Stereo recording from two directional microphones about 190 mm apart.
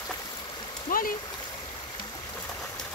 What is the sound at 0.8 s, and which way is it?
Stream, 45° left (ahead or behind).